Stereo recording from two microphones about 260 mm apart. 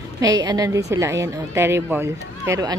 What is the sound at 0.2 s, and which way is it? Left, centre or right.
A woman's voice, centre.